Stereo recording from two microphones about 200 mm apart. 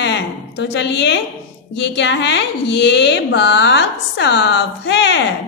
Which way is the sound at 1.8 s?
60° left (ahead or behind).